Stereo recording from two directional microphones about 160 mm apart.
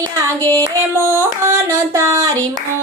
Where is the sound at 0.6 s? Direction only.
15° right (ahead or behind).